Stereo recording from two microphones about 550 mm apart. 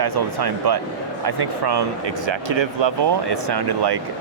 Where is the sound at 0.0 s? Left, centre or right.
Right.